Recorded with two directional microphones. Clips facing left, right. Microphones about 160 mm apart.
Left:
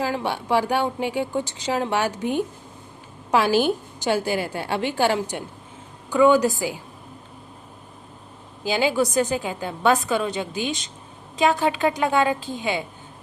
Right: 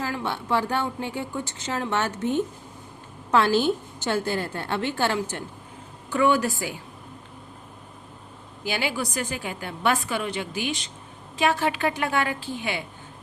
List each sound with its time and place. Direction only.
0.0 s a woman's voice: 20° left (ahead or behind)
8.7 s a woman's voice: 20° left (ahead or behind)